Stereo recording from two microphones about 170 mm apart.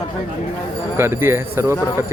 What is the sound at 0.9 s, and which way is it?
Speech, 15° right (ahead or behind).